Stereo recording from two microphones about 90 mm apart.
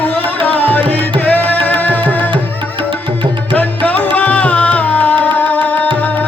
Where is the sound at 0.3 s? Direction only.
20° left (ahead or behind).